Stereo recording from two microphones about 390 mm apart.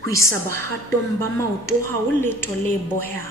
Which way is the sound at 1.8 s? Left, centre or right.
Centre.